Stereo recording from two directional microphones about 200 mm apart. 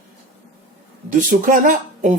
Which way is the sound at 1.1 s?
40° right (ahead or behind).